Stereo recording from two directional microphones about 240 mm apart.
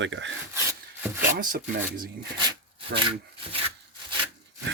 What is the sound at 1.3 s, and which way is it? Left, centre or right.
Speech, right.